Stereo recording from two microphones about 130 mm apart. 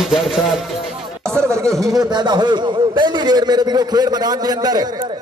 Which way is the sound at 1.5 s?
25° right (ahead or behind).